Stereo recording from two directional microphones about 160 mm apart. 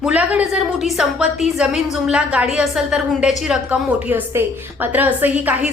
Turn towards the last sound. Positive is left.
turn(degrees=-10)  # may be behind; listen again after turning